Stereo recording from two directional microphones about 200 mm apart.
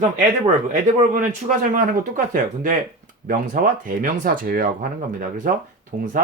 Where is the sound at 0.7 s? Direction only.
40° right (ahead or behind).